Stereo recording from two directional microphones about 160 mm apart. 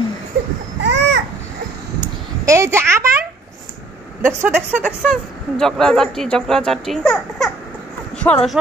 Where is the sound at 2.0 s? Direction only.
20° right (ahead or behind).